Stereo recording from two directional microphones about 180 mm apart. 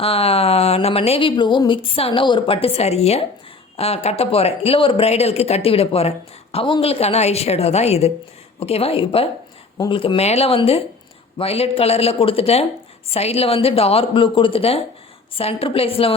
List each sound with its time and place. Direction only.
0.0 s speech: 35° left (ahead or behind)
9.7 s speech: 20° left (ahead or behind)
10.0 s speech: 35° left (ahead or behind)